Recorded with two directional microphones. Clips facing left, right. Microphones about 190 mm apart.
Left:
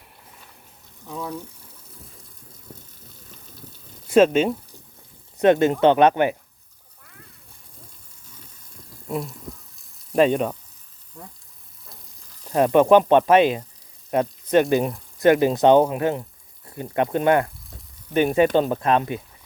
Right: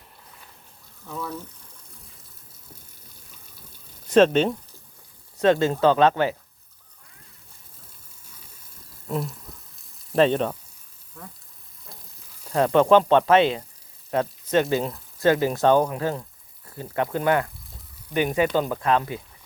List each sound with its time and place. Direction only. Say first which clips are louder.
1.0 s speech: left 2 dB; 15° left (ahead or behind)
4.0 s speech: left 1 dB; 10° left (ahead or behind)
5.4 s speech: left 3 dB; 20° left (ahead or behind)
9.0 s a sound: even; centre (ahead or behind)
10.2 s speech: left 1 dB; 10° left (ahead or behind)
12.5 s speech: left 2 dB; 15° left (ahead or behind)